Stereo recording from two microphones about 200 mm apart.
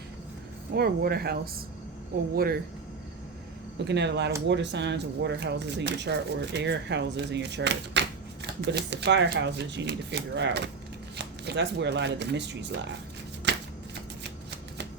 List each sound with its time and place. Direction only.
0.7 s speech: 50° right (ahead or behind)
3.8 s speech: 60° right (ahead or behind)
13.5 s shuffling cards: 60° right (ahead or behind)